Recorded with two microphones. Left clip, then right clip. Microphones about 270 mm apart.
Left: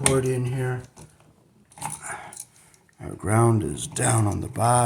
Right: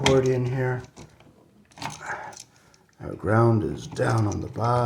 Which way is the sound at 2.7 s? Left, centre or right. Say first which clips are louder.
Right 2 dB; left.